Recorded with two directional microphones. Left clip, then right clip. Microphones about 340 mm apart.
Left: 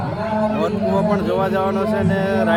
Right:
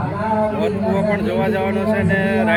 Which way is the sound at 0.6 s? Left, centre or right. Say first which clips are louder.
Even; centre.